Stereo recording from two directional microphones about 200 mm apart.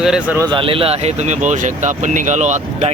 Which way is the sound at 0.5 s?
25° right (ahead or behind).